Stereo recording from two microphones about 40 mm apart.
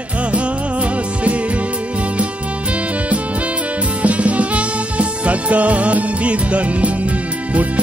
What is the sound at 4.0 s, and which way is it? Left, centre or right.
Music, right.